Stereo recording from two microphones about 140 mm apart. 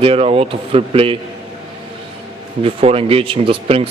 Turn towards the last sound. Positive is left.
turn(degrees=-40)  # may be behind; listen again after turning